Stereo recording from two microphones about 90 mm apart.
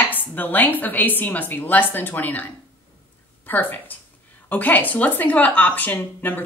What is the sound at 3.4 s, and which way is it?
A woman's voice, 20° left (ahead or behind).